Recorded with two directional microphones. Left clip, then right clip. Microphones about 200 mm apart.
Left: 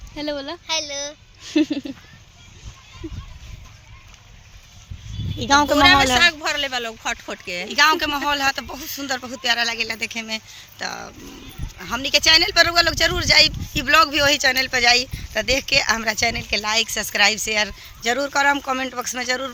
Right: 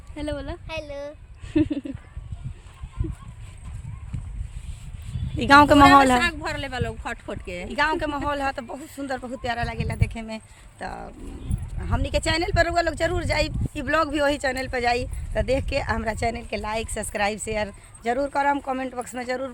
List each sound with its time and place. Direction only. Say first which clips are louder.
0.2 s speech: left 4 dB; 25° left (ahead or behind)
0.7 s speech: left 8 dB; 10° right (ahead or behind)
1.5 s speech: left 3 dB; 20° left (ahead or behind)
5.5 s speech: right 2 dB; 45° right (ahead or behind)
6.1 s speech: left 7 dB; 10° left (ahead or behind)
7.7 s speech: left 7 dB; 15° right (ahead or behind)